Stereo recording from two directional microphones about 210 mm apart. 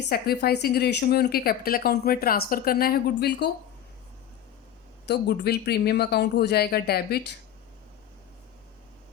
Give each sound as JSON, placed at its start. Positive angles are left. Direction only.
{"t": 0.1, "sound": "a woman's voice", "side_deg": 50}
{"t": 5.0, "sound": "a woman's voice", "side_deg": 50}